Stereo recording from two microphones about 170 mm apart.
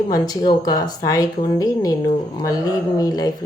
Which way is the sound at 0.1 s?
25° left (ahead or behind).